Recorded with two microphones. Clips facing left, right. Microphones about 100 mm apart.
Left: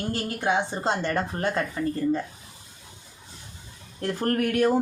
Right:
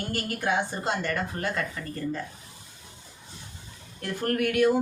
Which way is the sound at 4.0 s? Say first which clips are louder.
Left 2 dB; 35° left (ahead or behind).